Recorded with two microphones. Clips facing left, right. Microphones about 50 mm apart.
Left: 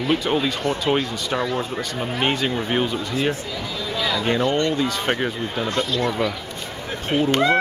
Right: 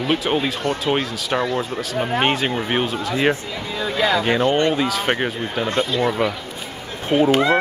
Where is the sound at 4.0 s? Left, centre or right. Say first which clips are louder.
Right 5 dB; right.